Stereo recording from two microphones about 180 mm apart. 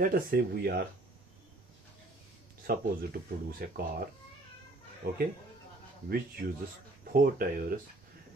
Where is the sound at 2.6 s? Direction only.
55° right (ahead or behind).